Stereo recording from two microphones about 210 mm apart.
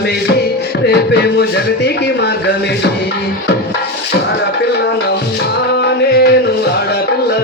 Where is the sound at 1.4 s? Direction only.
50° left (ahead or behind).